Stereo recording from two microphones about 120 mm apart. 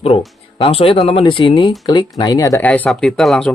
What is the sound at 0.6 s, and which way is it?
Speech, 50° left (ahead or behind).